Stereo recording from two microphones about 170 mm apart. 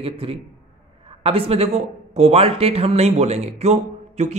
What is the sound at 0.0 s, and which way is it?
A man's voice, 35° right (ahead or behind).